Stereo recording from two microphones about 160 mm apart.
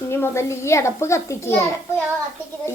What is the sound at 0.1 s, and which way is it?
Speech, 15° left (ahead or behind).